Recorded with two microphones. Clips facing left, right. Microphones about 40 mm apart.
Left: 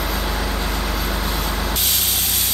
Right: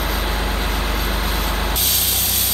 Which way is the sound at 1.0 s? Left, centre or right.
Centre.